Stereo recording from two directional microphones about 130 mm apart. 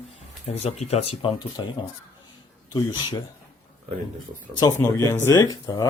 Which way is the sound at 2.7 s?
30° left (ahead or behind).